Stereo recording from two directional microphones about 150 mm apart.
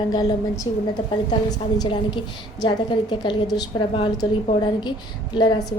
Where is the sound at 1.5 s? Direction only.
30° left (ahead or behind).